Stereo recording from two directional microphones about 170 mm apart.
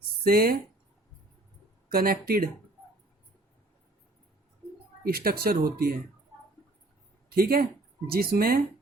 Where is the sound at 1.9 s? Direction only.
60° right (ahead or behind).